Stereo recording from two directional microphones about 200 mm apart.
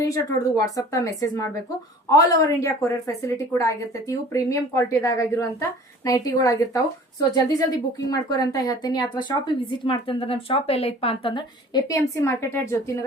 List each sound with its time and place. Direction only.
0.0 s a woman's voice: 15° left (ahead or behind)